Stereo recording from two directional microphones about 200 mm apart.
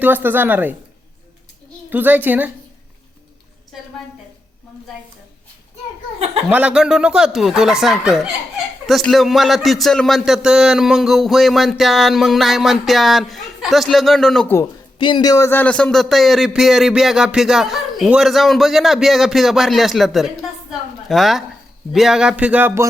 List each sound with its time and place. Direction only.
0.0 s speech: 10° right (ahead or behind)
1.9 s speech: 10° right (ahead or behind)
6.5 s speech: 5° right (ahead or behind)
14.9 s speech: 25° left (ahead or behind); by 22.9 s 10° right (ahead or behind)